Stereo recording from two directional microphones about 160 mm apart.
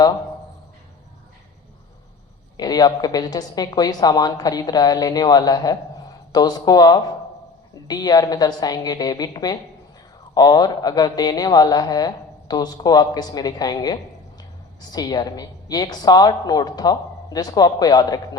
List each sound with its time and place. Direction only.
2.6 s a woman's voice: 25° left (ahead or behind)